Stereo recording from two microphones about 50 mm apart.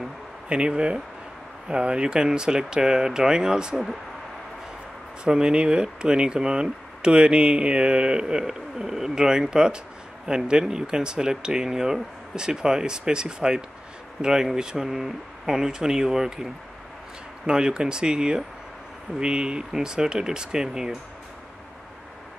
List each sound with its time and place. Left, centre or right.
0.5 s speech: right
5.2 s speech: centre
17.5 s speech: centre